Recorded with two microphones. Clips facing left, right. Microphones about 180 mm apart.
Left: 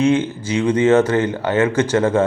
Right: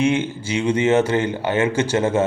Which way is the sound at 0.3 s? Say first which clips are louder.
Left 2 dB; 25° right (ahead or behind).